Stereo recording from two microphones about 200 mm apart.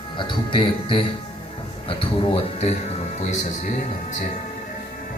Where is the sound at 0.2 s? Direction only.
25° left (ahead or behind).